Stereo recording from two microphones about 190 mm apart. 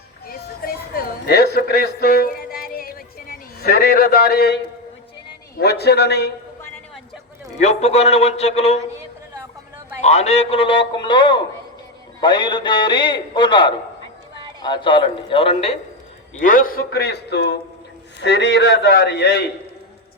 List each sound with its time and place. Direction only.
0.3 s music: 50° left (ahead or behind)
5.5 s a man's voice: 60° left (ahead or behind)
7.6 s a man's voice: 35° left (ahead or behind)
10.0 s a man's voice: 35° left (ahead or behind)
16.3 s a man's voice: 45° left (ahead or behind); by 19.5 s 65° left (ahead or behind)